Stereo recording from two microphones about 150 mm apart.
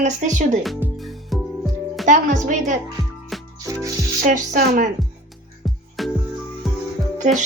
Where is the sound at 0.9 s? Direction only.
Centre (ahead or behind).